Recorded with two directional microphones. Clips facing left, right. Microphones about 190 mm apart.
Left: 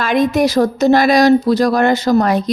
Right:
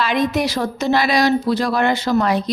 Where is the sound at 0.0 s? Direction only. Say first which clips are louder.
Left 5 dB; 45° left (ahead or behind).